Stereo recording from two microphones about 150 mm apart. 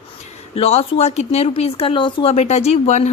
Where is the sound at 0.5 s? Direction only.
40° left (ahead or behind).